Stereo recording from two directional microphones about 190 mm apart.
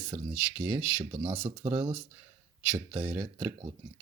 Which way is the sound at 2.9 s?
15° right (ahead or behind).